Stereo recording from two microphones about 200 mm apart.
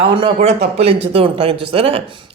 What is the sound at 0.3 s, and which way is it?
Speech, 30° right (ahead or behind).